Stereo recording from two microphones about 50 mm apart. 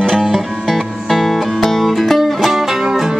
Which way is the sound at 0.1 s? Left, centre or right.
Centre.